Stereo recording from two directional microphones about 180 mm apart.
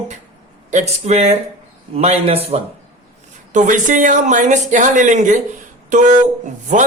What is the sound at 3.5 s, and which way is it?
Speech, 45° right (ahead or behind).